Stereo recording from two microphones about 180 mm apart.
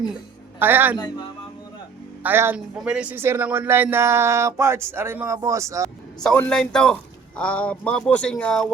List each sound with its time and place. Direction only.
0.6 s speech: 10° right (ahead or behind)
0.9 s speech: 25° left (ahead or behind)
2.2 s speech: 10° right (ahead or behind)
6.2 s a man's voice: 5° left (ahead or behind)